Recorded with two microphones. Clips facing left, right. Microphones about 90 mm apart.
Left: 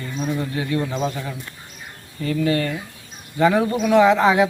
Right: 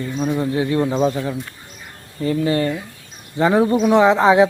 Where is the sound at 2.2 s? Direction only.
25° right (ahead or behind).